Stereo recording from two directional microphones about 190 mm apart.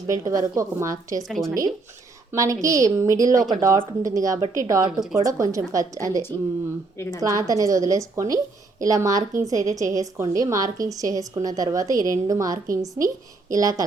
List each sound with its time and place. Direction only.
0.1 s a woman's voice: 15° right (ahead or behind)
1.2 s a woman's voice: centre (ahead or behind)
2.3 s a woman's voice: 15° right (ahead or behind)
6.9 s a woman's voice: 15° left (ahead or behind)
7.2 s a woman's voice: 20° right (ahead or behind)